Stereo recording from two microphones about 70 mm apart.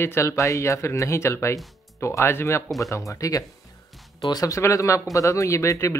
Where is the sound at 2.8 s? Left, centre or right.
Left.